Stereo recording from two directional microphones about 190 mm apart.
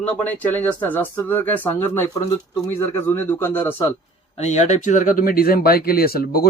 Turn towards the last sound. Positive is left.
turn(degrees=50)  # may be behind; listen again after turning